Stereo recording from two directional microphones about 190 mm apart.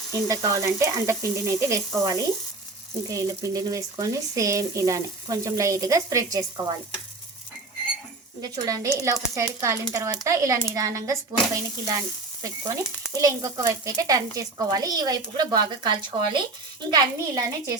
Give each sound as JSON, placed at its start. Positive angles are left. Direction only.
{"t": 0.3, "sound": "speech", "side_deg": -15}
{"t": 8.4, "sound": "speech", "side_deg": -15}